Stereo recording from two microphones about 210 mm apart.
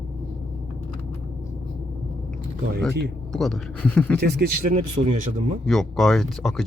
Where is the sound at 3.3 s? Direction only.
Centre (ahead or behind).